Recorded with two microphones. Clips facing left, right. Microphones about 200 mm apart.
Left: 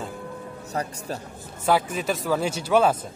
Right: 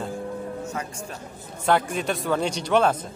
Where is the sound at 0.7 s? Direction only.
35° left (ahead or behind).